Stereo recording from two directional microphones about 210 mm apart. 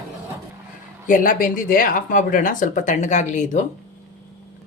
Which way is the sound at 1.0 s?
40° left (ahead or behind).